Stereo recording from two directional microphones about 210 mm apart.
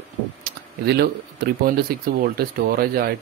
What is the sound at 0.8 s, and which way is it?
Speech, 50° right (ahead or behind).